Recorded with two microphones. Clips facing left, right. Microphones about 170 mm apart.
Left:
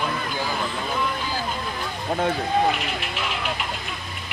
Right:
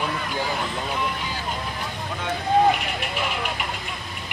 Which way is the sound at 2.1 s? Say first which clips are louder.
Left 8 dB; 45° left (ahead or behind).